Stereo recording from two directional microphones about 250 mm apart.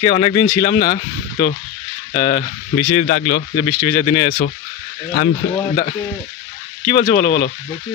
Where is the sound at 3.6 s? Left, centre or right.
Centre.